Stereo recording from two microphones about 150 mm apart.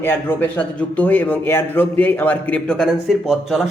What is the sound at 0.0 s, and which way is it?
Speech, 15° left (ahead or behind).